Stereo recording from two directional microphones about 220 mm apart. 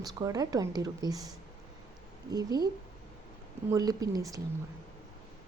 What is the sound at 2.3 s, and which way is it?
Speech, 15° right (ahead or behind).